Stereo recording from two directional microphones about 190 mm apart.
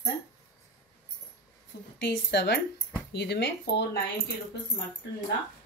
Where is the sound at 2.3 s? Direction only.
65° left (ahead or behind).